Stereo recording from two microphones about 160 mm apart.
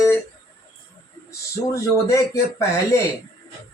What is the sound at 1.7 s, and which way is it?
Speech, 20° left (ahead or behind).